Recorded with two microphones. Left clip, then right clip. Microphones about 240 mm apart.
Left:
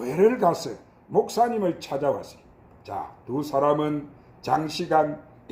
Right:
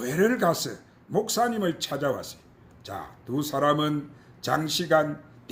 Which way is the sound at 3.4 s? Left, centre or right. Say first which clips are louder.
Left 2 dB; right.